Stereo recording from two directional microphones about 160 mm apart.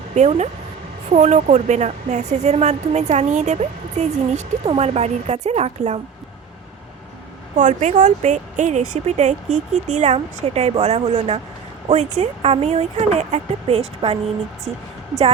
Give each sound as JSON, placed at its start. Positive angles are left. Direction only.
{"t": 0.1, "sound": "speech", "side_deg": -45}
{"t": 7.5, "sound": "speech", "side_deg": -50}